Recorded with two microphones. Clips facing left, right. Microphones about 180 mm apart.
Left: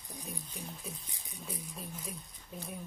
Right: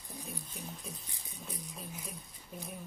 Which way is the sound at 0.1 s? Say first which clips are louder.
Even; 15° left (ahead or behind).